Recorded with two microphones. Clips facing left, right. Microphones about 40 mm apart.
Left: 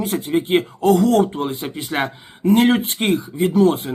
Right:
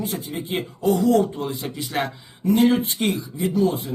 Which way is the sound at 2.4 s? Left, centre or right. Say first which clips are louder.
Left 3 dB; left.